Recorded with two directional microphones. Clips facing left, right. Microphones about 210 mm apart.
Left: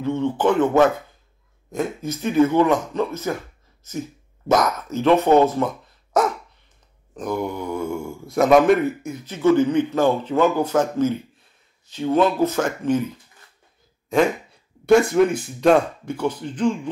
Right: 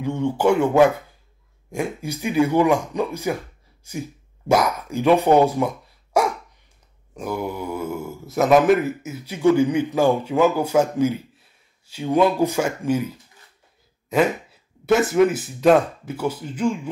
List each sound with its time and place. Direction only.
0.0 s speech: 15° right (ahead or behind)